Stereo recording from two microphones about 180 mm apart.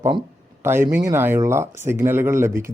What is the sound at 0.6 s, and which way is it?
Speech, 15° right (ahead or behind).